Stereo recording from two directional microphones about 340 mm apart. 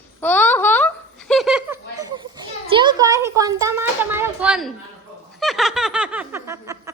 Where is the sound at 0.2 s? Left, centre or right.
Centre.